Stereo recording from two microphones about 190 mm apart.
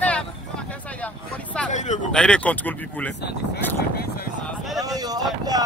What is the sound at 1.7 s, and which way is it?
Speech, 40° left (ahead or behind).